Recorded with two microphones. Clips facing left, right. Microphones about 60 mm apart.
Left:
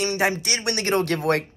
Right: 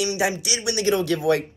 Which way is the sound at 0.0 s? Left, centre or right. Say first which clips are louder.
Left 1 dB; left.